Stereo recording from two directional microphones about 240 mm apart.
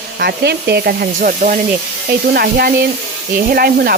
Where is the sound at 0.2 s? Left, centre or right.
Right.